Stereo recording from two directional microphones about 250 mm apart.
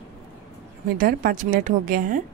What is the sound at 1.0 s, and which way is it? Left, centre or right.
A woman's voice, right.